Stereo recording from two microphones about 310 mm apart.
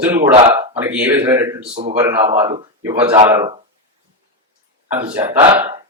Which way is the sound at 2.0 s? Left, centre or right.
Centre.